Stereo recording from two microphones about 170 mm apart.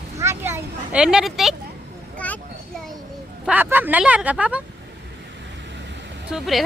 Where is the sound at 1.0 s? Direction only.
5° right (ahead or behind).